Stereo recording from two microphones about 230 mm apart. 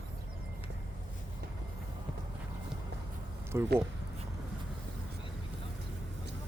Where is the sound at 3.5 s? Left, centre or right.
Centre.